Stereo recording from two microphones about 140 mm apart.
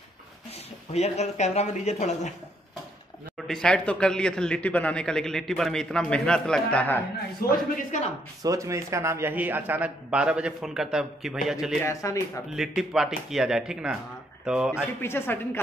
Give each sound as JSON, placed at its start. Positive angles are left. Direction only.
{"t": 0.9, "sound": "speech", "side_deg": 50}
{"t": 3.4, "sound": "speech", "side_deg": 5}
{"t": 7.4, "sound": "speech", "side_deg": 90}
{"t": 7.9, "sound": "speech", "side_deg": 60}
{"t": 8.4, "sound": "a man's voice", "side_deg": -25}
{"t": 11.8, "sound": "speech", "side_deg": 20}
{"t": 12.5, "sound": "speech", "side_deg": -5}
{"t": 15.0, "sound": "speech", "side_deg": 15}